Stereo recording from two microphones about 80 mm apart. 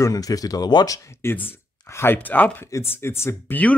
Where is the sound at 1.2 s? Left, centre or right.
Left.